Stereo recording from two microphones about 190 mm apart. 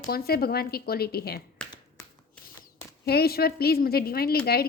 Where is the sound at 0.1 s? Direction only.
55° left (ahead or behind).